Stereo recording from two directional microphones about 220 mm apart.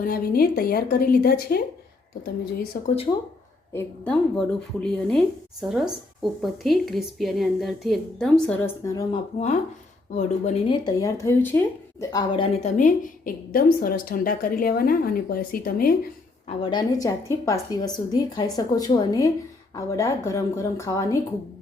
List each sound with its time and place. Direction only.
0.0 s a woman's voice: 40° left (ahead or behind)
2.8 s speech: 25° left (ahead or behind)
3.7 s a woman's voice: 10° left (ahead or behind)
10.2 s a woman's voice: 35° left (ahead or behind)
10.8 s a woman's voice: 15° left (ahead or behind); by 16.0 s 40° left (ahead or behind)
16.5 s a woman's voice: 25° left (ahead or behind)